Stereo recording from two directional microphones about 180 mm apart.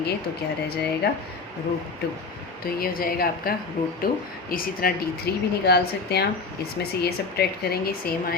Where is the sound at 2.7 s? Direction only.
55° left (ahead or behind).